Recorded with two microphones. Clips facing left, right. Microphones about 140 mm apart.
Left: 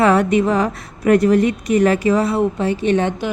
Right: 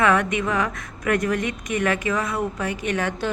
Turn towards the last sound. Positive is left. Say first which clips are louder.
# left 8 dB
turn(degrees=30)  # may be behind; listen again after turning